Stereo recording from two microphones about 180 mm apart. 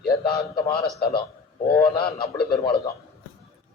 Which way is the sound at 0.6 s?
30° left (ahead or behind).